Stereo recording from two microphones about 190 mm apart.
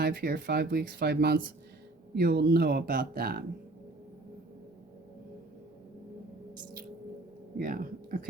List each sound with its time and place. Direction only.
0.0 s speech: 55° right (ahead or behind)
7.6 s speech: 50° right (ahead or behind)